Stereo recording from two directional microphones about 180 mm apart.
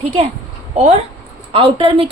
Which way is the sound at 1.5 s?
30° right (ahead or behind).